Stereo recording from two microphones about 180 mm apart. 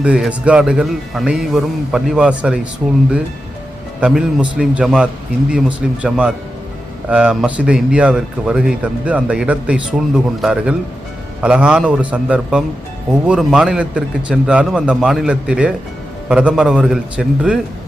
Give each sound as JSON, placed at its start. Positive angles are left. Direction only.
{"t": 0.0, "sound": "speech", "side_deg": -5}
{"t": 4.0, "sound": "a man's voice", "side_deg": -5}